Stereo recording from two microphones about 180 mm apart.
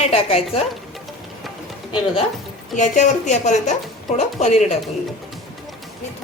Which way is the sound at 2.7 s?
40° left (ahead or behind).